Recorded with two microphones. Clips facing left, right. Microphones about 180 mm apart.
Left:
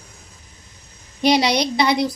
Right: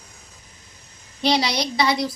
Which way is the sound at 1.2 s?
20° left (ahead or behind).